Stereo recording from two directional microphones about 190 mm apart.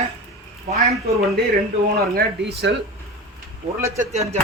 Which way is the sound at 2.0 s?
55° right (ahead or behind).